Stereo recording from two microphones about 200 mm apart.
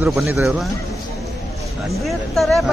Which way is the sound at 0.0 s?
5° right (ahead or behind).